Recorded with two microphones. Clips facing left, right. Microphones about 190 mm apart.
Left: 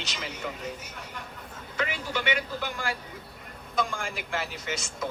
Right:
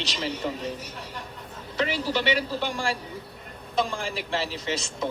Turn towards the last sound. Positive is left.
turn(degrees=-30)  # may be behind; listen again after turning